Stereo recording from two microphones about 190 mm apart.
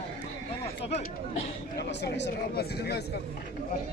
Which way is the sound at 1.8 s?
60° left (ahead or behind).